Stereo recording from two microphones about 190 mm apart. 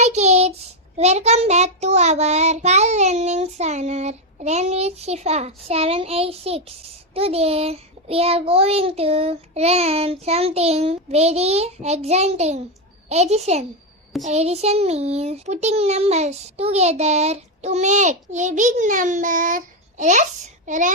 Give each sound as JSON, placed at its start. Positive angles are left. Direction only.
{"t": 0.0, "sound": "child singing", "side_deg": -35}